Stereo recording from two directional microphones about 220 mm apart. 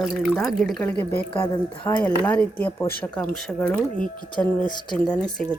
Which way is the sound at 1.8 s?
5° left (ahead or behind).